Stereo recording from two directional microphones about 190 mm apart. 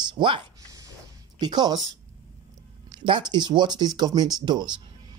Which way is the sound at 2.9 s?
25° right (ahead or behind).